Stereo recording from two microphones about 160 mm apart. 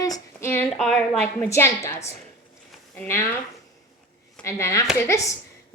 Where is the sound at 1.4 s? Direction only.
15° left (ahead or behind).